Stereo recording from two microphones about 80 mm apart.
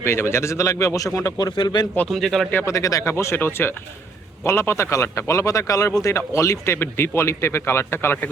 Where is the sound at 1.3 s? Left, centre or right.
Left.